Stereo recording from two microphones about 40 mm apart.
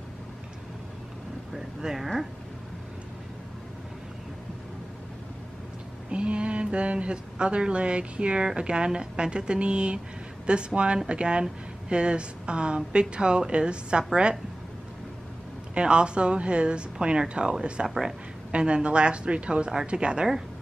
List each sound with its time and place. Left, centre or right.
1.5 s speech: centre
6.0 s speech: right
15.7 s speech: right
17.8 s speech: centre
18.5 s speech: right